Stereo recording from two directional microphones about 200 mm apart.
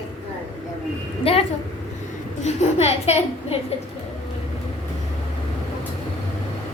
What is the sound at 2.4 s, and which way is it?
A child's voice, 35° left (ahead or behind).